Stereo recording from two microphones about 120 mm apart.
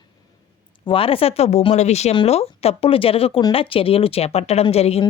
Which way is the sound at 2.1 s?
55° left (ahead or behind).